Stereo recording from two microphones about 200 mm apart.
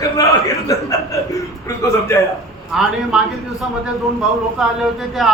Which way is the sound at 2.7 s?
Centre (ahead or behind).